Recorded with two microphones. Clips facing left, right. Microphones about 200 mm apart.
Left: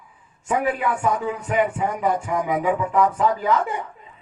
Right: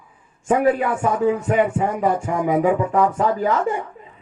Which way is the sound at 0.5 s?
25° right (ahead or behind).